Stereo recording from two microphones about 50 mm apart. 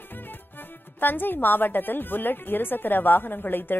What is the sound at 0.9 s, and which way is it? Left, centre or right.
A woman's voice, left.